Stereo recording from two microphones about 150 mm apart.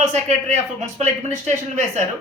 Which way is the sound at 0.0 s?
50° right (ahead or behind).